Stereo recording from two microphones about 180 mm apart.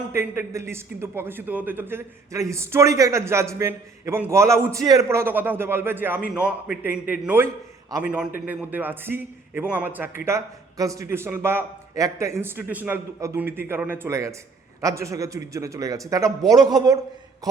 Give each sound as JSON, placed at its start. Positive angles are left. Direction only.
{"t": 0.1, "sound": "a man's voice", "side_deg": -15}